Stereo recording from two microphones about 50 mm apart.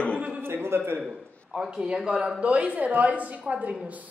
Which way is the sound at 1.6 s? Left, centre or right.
Centre.